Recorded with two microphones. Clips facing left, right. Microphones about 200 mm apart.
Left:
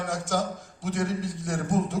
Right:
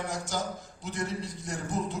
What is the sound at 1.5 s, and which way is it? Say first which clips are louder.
Speech: left 6 dB; 60° left (ahead or behind).